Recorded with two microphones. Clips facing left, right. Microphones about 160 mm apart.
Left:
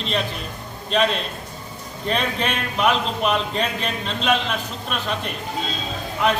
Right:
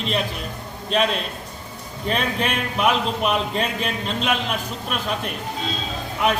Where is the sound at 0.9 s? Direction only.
5° right (ahead or behind).